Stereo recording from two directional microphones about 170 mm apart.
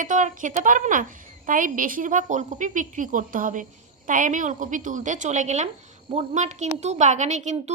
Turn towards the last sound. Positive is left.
turn(degrees=-45)  # may be behind; listen again after turning